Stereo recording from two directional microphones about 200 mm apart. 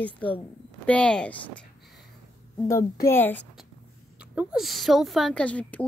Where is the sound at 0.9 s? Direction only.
5° left (ahead or behind).